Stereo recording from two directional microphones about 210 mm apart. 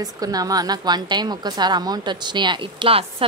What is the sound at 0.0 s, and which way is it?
A woman's voice, 15° right (ahead or behind).